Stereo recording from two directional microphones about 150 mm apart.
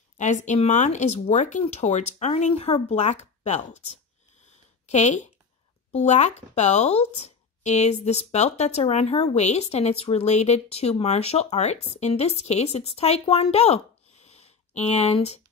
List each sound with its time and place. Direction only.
0.2 s speech: 55° left (ahead or behind)